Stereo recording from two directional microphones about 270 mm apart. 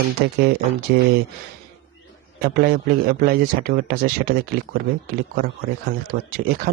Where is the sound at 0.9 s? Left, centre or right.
Right.